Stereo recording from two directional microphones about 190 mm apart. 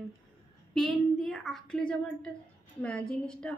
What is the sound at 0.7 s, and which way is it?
A woman's voice, centre (ahead or behind).